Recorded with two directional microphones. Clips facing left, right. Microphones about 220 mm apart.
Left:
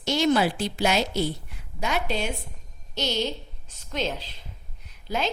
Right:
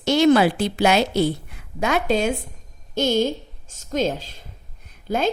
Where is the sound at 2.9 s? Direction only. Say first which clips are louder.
Right 8 dB; 50° right (ahead or behind).